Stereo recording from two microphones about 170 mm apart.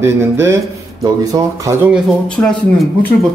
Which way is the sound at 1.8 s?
5° left (ahead or behind).